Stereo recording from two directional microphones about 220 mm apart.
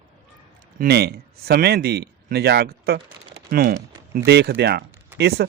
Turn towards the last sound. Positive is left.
turn(degrees=-45)  # may be behind; listen again after turning